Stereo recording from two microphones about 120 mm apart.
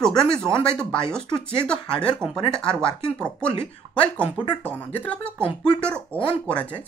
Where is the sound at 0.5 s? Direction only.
25° right (ahead or behind).